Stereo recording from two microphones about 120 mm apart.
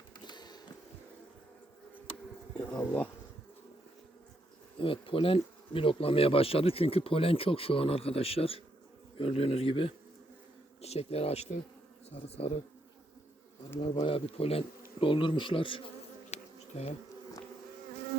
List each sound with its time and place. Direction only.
0.3 s a sound: 35° left (ahead or behind)
2.6 s speech: 10° left (ahead or behind)
4.8 s speech: 50° left (ahead or behind)
14.0 s speech: 50° left (ahead or behind)
16.3 s bee: 60° left (ahead or behind)